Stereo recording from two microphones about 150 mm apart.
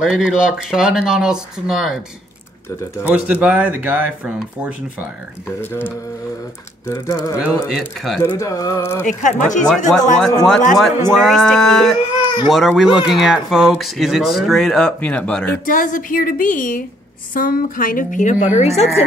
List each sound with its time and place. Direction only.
0.0 s speech: 5° right (ahead or behind)
3.0 s speech: 10° right (ahead or behind)
6.9 s speech: 20° left (ahead or behind)
7.3 s speech: 5° right (ahead or behind)
8.4 s speech: 20° left (ahead or behind)
9.0 s a woman's voice: 55° left (ahead or behind)
10.1 s speech: 5° left (ahead or behind)
15.6 s a woman's voice: 65° left (ahead or behind)
17.3 s a woman's voice: 75° left (ahead or behind); by 18.9 s 50° left (ahead or behind)